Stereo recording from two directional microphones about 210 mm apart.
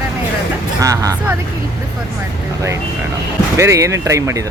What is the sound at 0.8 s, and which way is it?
Speech, 15° right (ahead or behind).